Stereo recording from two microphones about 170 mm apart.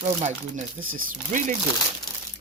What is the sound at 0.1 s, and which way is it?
Speech, 45° right (ahead or behind).